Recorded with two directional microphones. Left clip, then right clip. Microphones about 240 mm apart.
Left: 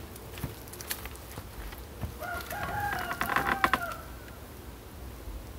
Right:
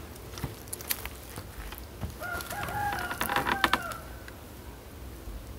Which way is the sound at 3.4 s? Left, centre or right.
Right.